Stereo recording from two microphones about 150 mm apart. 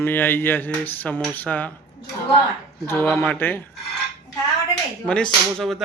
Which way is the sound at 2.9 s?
15° left (ahead or behind).